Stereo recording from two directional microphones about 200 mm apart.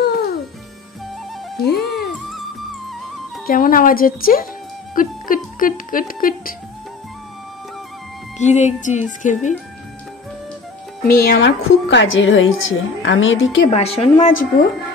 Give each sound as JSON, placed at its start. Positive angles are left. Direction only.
{"t": 0.0, "sound": "music", "side_deg": 50}
{"t": 1.8, "sound": "music", "side_deg": 0}
{"t": 3.4, "sound": "speech", "side_deg": 45}
{"t": 8.4, "sound": "speech", "side_deg": 35}
{"t": 11.1, "sound": "a woman's voice", "side_deg": 50}
{"t": 13.7, "sound": "speech", "side_deg": 30}